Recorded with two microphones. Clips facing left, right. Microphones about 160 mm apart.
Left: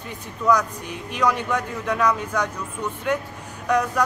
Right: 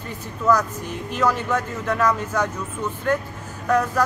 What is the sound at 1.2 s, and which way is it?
Speech, 5° right (ahead or behind).